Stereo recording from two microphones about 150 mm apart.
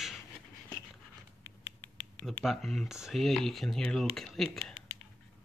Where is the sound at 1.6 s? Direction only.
10° left (ahead or behind).